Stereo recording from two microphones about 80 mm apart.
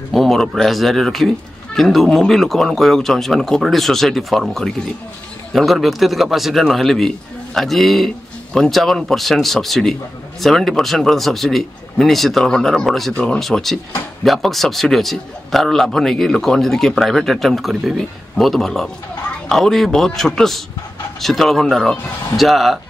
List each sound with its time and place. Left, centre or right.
0.1 s a man's voice: centre
13.1 s speech: centre
13.4 s a man's voice: centre